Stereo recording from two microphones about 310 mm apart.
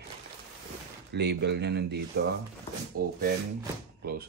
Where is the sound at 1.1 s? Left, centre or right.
Right.